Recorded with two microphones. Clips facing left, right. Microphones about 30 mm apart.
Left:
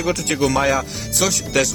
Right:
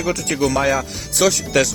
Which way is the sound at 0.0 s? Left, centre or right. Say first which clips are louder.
Even; centre.